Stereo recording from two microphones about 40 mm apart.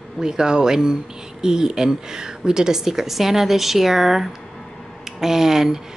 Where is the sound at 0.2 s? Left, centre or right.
Centre.